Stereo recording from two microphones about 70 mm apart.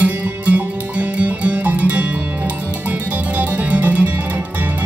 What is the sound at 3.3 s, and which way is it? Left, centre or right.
Music, right.